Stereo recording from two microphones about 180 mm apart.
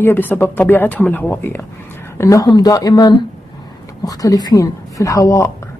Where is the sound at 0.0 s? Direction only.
10° left (ahead or behind).